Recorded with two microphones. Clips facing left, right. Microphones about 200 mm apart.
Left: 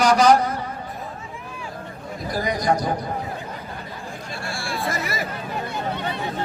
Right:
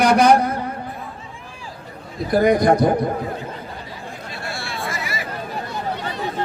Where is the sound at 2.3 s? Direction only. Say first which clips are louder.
Right 8 dB; 55° right (ahead or behind).